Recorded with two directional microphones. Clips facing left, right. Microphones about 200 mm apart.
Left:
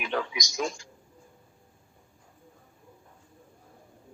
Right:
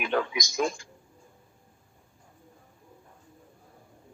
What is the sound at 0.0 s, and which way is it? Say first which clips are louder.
Speech: right 3 dB; 50° right (ahead or behind).